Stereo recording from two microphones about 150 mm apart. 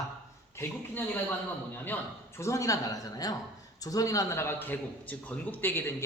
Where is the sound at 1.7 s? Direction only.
15° left (ahead or behind).